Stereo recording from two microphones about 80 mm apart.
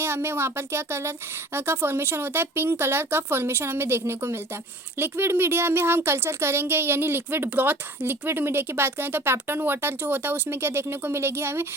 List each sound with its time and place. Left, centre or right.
0.0 s speech: right